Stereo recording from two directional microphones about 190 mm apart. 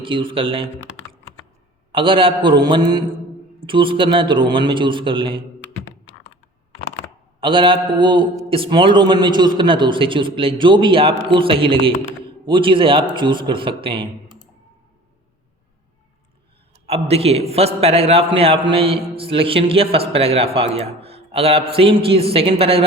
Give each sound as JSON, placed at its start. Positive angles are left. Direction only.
{"t": 0.0, "sound": "a man's voice", "side_deg": -25}
{"t": 1.9, "sound": "a man's voice", "side_deg": -25}
{"t": 7.4, "sound": "a man's voice", "side_deg": -25}
{"t": 16.8, "sound": "a man's voice", "side_deg": -30}